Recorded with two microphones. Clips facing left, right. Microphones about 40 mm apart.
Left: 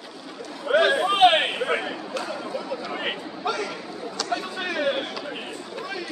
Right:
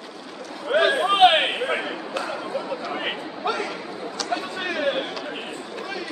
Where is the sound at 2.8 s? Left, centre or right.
Centre.